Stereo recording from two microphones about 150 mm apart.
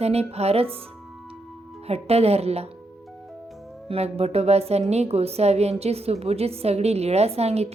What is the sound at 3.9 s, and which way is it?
A woman's voice, 40° right (ahead or behind).